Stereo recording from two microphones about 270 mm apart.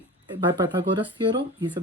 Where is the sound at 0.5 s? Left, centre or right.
Centre.